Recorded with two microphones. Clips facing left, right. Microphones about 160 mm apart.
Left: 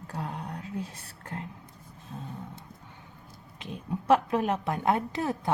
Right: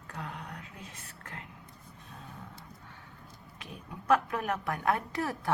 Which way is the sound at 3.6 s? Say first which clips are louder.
Left 8 dB; 25° left (ahead or behind).